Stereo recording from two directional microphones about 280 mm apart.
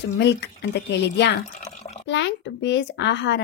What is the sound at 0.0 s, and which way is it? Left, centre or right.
Speech, left.